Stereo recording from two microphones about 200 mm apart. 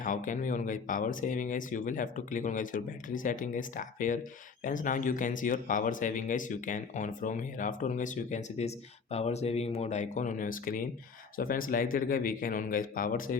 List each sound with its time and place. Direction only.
0.0 s speech: 40° left (ahead or behind)